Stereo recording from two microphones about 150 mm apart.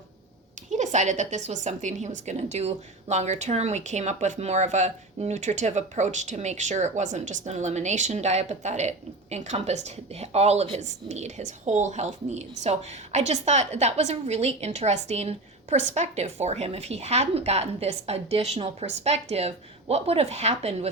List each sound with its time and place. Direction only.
0.7 s a woman's voice: 50° right (ahead or behind)